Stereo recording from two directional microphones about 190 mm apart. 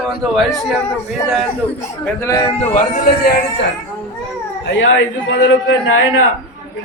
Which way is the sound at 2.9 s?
55° left (ahead or behind).